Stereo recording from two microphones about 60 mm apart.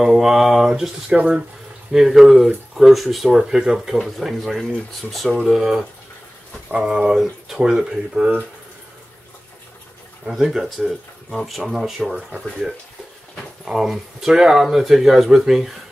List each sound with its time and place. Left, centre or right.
0.0 s speech: centre
1.1 s speech: right
1.9 s speech: centre
10.2 s speech: centre
11.2 s speech: centre
12.1 s speech: centre
13.7 s speech: centre